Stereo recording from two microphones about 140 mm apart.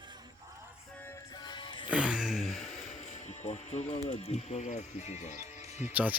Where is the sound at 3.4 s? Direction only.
55° left (ahead or behind).